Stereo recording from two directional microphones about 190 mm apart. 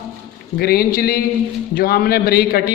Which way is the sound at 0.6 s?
55° left (ahead or behind).